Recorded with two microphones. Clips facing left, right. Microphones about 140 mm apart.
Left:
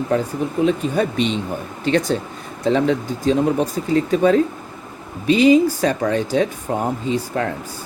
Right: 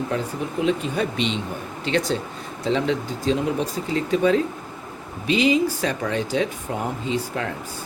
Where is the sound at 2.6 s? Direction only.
45° left (ahead or behind).